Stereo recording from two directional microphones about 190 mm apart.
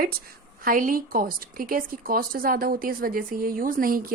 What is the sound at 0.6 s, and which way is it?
A woman's voice, 45° right (ahead or behind).